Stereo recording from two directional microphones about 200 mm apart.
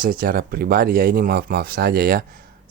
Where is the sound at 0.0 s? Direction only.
45° right (ahead or behind).